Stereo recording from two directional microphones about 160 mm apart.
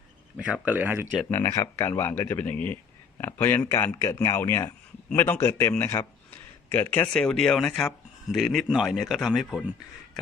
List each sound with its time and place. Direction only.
0.3 s speech: 5° right (ahead or behind)
1.3 s speech: 20° left (ahead or behind); by 9.6 s centre (ahead or behind)